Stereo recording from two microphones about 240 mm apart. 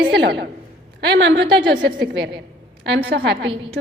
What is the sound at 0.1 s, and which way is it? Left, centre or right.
A woman's voice, right.